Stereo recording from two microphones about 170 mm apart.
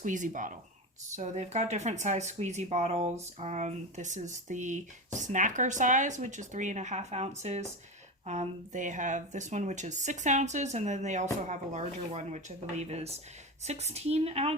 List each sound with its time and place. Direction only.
0.0 s a woman's voice: 50° right (ahead or behind)